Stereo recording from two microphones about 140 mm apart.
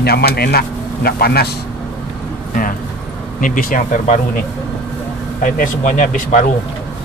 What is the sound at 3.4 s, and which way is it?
Speech, 70° left (ahead or behind).